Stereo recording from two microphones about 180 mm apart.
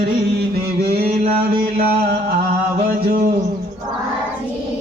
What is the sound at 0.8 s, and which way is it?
Mantra, 60° right (ahead or behind).